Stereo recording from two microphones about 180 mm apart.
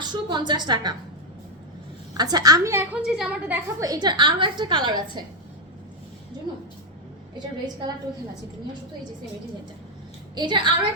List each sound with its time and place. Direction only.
0.0 s a woman's voice: 25° right (ahead or behind)
2.1 s a woman's voice: 20° right (ahead or behind); by 3.6 s 5° right (ahead or behind)
3.8 s a woman's voice: 20° right (ahead or behind)
7.3 s a woman's voice: 25° right (ahead or behind)
10.3 s a woman's voice: 25° right (ahead or behind)